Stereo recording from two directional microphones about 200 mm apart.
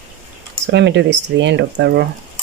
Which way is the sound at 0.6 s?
60° right (ahead or behind).